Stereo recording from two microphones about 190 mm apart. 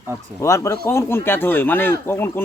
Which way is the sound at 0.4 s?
15° left (ahead or behind).